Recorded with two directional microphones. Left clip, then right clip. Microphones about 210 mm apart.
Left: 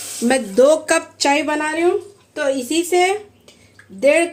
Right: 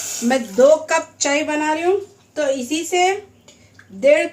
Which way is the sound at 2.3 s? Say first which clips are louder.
Even; 30° left (ahead or behind).